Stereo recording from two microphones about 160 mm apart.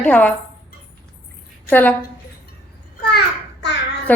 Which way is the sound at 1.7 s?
10° left (ahead or behind).